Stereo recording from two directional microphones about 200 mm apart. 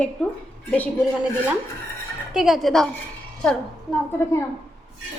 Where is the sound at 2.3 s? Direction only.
Centre (ahead or behind).